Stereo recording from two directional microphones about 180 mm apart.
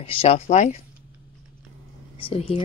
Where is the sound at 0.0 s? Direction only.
30° left (ahead or behind).